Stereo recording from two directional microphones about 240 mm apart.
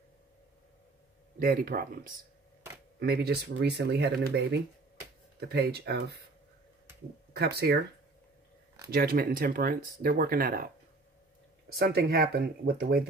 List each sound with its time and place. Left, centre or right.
1.4 s speech: right
7.3 s speech: right
8.8 s speech: right
11.8 s speech: right